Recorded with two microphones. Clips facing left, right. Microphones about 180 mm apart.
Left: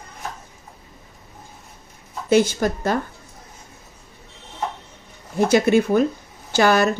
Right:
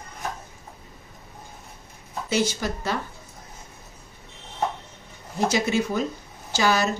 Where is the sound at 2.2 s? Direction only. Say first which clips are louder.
Left 8 dB; 55° left (ahead or behind).